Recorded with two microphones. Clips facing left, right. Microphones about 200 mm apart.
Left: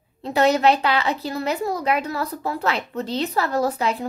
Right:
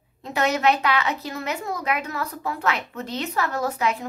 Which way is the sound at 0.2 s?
35° left (ahead or behind).